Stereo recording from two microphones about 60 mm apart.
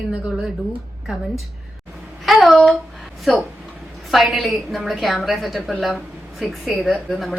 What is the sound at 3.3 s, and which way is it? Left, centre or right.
A woman's voice, centre.